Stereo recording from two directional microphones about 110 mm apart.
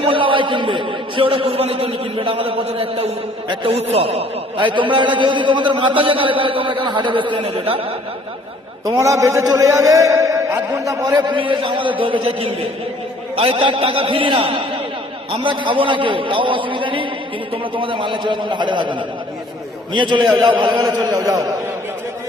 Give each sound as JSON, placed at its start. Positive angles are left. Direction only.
{"t": 0.0, "sound": "a sound", "side_deg": -50}
{"t": 3.5, "sound": "a man's voice", "side_deg": -55}
{"t": 3.9, "sound": "a man's voice", "side_deg": -65}
{"t": 8.8, "sound": "a man's voice", "side_deg": -30}
{"t": 11.1, "sound": "a man's voice", "side_deg": -45}